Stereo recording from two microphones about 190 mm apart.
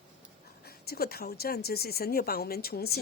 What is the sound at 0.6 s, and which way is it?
A woman's voice, 55° left (ahead or behind).